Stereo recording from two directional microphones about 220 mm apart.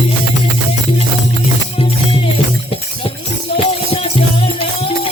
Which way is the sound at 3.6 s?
25° left (ahead or behind).